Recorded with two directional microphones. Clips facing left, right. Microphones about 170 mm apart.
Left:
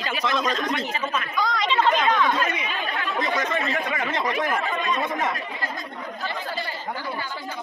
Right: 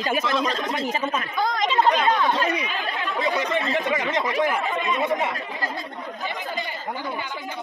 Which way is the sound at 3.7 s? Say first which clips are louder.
Right 3 dB; 20° right (ahead or behind).